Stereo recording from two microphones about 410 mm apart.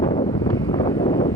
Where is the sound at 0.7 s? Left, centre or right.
Centre.